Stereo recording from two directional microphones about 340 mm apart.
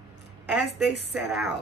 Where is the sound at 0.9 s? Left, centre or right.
Left.